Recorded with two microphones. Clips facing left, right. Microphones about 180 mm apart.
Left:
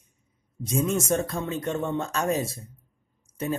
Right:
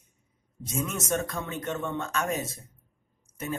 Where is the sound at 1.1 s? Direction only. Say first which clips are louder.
Left 4 dB; 30° left (ahead or behind).